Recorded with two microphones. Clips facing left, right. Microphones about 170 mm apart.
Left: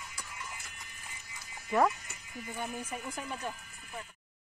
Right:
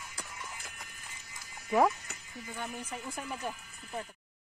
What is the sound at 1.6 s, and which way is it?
Speech, 5° right (ahead or behind).